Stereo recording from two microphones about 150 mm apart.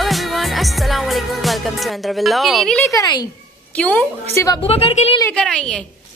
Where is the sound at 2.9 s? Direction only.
25° left (ahead or behind).